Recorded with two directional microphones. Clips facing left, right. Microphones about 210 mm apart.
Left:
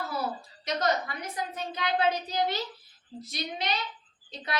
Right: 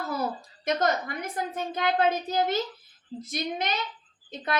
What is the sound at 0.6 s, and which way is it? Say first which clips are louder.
A woman's voice: right 3 dB; 50° right (ahead or behind).